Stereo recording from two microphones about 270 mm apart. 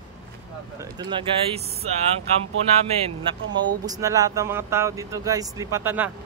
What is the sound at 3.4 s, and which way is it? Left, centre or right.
Speech, right.